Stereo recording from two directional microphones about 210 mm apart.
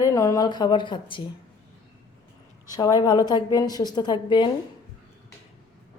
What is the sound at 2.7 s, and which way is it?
A woman's voice, 15° left (ahead or behind).